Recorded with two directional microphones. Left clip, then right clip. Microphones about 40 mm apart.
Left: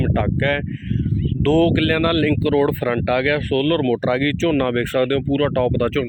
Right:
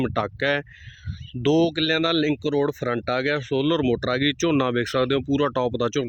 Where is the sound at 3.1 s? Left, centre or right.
Centre.